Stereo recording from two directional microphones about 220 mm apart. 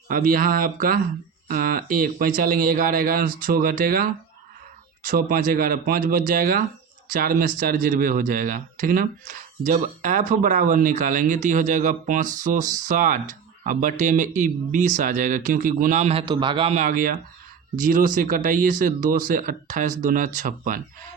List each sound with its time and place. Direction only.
0.1 s speech: 40° right (ahead or behind)